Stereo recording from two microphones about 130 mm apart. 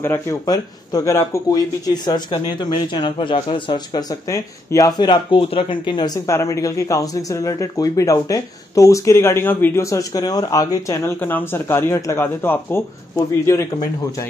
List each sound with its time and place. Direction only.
0.0 s speech: 15° left (ahead or behind)